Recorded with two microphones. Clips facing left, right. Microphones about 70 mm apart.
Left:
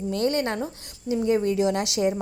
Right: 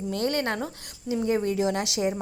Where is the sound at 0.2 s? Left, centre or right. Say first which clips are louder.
Left 2 dB; right.